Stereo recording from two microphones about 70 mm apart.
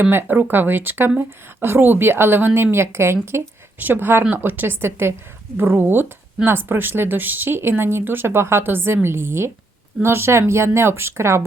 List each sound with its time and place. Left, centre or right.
0.0 s speech: right
3.3 s speech: right